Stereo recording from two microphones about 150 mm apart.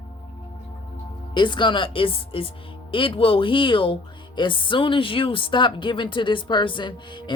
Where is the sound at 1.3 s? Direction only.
30° left (ahead or behind).